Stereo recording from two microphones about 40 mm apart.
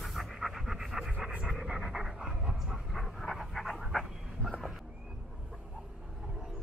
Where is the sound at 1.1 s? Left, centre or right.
Right.